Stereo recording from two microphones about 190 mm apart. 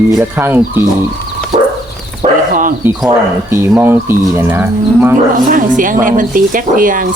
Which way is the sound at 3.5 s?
10° right (ahead or behind).